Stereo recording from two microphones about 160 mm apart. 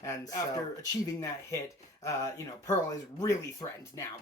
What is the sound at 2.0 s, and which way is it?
Speech, 20° left (ahead or behind).